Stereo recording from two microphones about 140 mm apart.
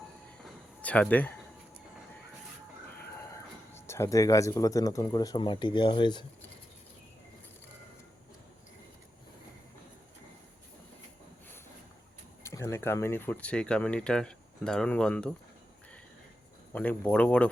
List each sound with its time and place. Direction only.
0.8 s speech: 10° left (ahead or behind)
3.2 s speech: 20° left (ahead or behind)
12.4 s speech: 20° left (ahead or behind)
16.7 s speech: 10° left (ahead or behind)